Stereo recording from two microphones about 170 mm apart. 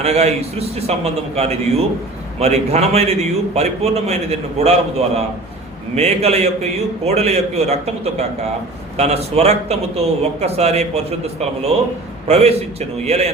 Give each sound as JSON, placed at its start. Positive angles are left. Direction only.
{"t": 0.0, "sound": "a man's voice", "side_deg": -40}